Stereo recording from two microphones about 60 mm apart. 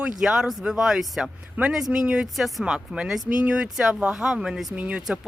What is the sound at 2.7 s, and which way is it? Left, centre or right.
Speech, centre.